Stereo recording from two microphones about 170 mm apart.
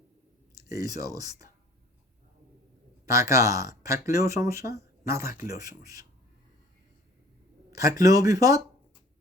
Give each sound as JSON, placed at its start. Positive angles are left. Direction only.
{"t": 0.5, "sound": "speech", "side_deg": -20}
{"t": 3.1, "sound": "speech", "side_deg": -20}
{"t": 7.7, "sound": "speech", "side_deg": -20}